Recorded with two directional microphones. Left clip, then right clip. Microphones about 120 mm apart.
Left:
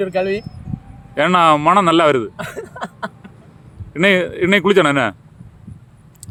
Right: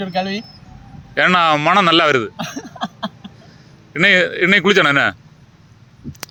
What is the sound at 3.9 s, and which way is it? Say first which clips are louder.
A man's voice: right 2 dB; 15° left (ahead or behind).